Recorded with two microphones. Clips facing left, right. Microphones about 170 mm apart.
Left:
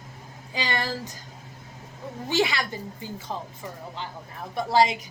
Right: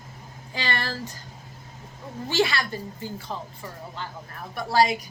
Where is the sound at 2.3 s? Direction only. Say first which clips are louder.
Right 1 dB; 15° left (ahead or behind).